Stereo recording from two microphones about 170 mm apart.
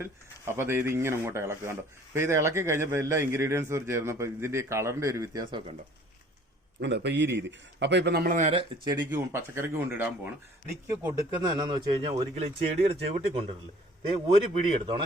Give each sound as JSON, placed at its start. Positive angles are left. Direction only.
{"t": 0.0, "sound": "speech", "side_deg": -15}
{"t": 6.7, "sound": "a man's voice", "side_deg": -80}
{"t": 9.0, "sound": "speech", "side_deg": -15}
{"t": 14.3, "sound": "speech", "side_deg": -30}